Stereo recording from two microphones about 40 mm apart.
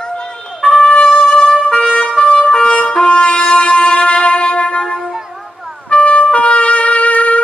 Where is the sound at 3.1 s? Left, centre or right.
Left.